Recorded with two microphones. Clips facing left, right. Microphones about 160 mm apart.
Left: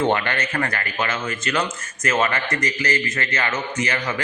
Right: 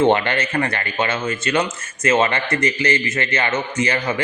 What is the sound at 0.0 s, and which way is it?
A man's voice, 25° right (ahead or behind).